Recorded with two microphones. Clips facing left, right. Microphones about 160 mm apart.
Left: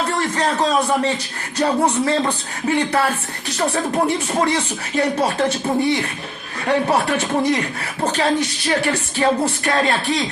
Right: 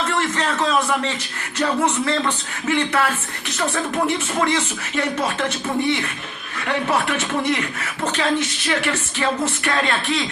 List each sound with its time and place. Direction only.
0.0 s a man's voice: 35° left (ahead or behind)